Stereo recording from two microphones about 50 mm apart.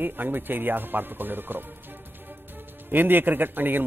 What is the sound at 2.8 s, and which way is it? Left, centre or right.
Speech, right.